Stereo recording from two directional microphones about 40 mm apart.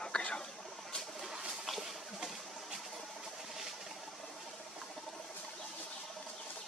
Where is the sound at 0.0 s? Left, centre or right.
Left.